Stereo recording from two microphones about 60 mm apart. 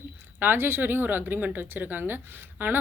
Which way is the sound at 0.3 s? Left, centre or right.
Right.